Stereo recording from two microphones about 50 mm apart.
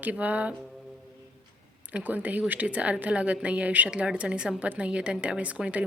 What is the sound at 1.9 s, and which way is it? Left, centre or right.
Speech, right.